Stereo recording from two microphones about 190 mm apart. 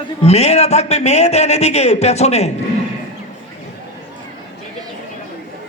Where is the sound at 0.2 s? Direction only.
35° left (ahead or behind).